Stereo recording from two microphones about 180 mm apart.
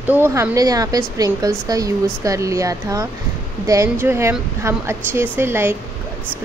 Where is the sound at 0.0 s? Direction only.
10° right (ahead or behind).